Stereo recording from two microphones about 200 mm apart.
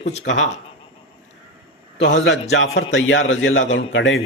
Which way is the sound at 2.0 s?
65° left (ahead or behind).